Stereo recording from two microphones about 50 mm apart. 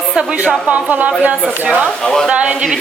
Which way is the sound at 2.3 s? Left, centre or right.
Right.